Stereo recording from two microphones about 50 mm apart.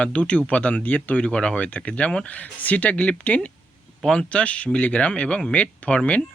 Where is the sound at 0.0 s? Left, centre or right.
Left.